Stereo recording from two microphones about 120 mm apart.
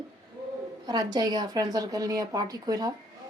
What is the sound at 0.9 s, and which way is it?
A woman's voice, 35° right (ahead or behind).